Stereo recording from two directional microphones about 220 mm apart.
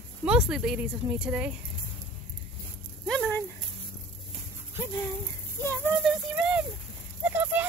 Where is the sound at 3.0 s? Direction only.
Centre (ahead or behind).